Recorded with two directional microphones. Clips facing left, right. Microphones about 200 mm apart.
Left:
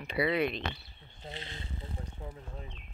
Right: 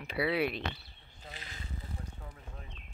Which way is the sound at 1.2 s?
30° left (ahead or behind).